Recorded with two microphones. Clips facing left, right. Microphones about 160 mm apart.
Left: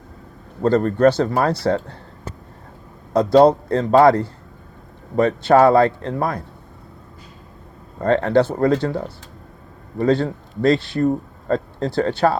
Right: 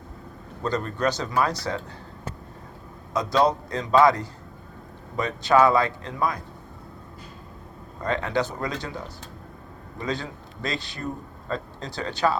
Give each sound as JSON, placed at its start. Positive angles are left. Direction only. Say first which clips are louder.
{"t": 0.6, "sound": "speech", "louder": "left 11 dB", "side_deg": 60}
{"t": 3.3, "sound": "speech", "louder": "left 9 dB", "side_deg": 60}
{"t": 7.9, "sound": "speech", "louder": "left 10 dB", "side_deg": 60}